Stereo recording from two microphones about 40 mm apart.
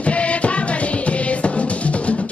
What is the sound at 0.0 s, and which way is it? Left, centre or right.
Music, left.